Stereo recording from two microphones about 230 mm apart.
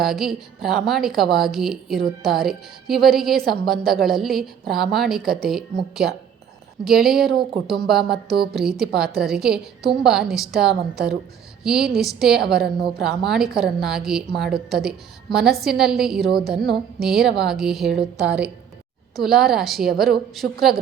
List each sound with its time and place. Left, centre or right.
0.0 s a woman's voice: centre
8.5 s a woman's voice: centre